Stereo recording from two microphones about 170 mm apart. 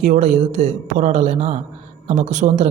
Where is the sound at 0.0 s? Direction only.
45° right (ahead or behind).